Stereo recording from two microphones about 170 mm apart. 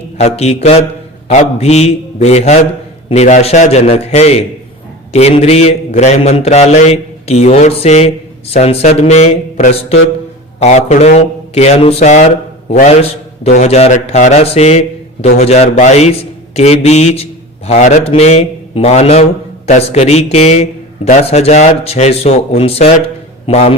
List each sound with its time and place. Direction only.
0.2 s a man's voice: 40° left (ahead or behind)